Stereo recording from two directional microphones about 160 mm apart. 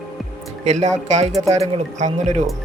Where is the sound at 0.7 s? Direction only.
45° right (ahead or behind).